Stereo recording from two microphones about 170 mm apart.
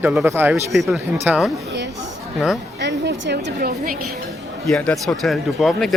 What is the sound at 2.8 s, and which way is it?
A woman's voice, 90° right.